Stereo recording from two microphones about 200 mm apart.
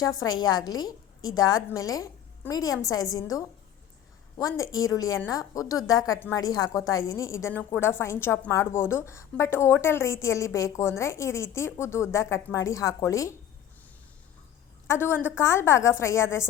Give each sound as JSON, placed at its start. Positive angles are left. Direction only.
{"t": 0.0, "sound": "a woman's voice", "side_deg": 15}
{"t": 14.8, "sound": "a woman's voice", "side_deg": 10}